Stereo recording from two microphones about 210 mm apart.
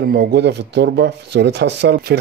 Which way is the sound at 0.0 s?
50° right (ahead or behind).